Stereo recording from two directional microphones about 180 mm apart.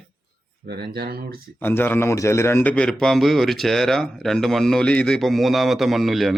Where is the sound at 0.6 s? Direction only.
60° right (ahead or behind).